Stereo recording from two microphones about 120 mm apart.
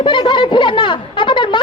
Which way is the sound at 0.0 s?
40° left (ahead or behind).